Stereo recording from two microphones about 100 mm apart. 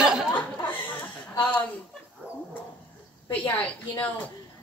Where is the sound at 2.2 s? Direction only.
15° right (ahead or behind).